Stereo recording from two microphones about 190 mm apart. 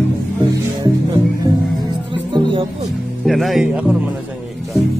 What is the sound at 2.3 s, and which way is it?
Music, 30° right (ahead or behind).